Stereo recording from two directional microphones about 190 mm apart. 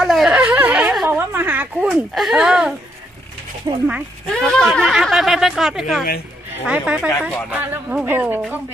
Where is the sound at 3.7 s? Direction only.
20° right (ahead or behind).